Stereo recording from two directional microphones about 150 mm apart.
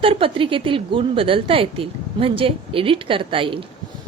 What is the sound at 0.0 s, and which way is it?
A woman's voice, 35° right (ahead or behind).